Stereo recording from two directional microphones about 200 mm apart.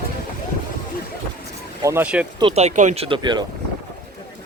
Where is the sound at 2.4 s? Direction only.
30° right (ahead or behind).